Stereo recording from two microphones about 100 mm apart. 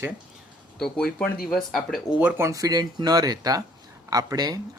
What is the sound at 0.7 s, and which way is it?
Speech, 5° left (ahead or behind).